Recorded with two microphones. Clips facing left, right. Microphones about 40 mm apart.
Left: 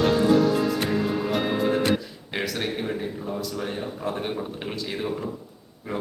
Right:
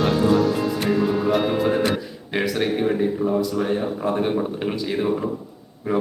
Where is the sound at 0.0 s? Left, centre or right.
Centre.